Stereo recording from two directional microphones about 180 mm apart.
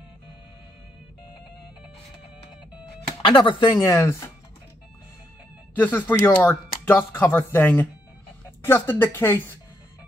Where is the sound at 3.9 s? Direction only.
15° left (ahead or behind).